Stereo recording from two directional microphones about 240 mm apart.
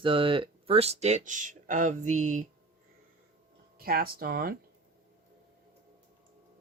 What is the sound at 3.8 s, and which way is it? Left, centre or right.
Speech, right.